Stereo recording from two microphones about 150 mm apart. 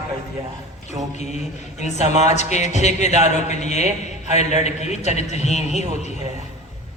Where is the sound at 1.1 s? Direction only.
50° left (ahead or behind).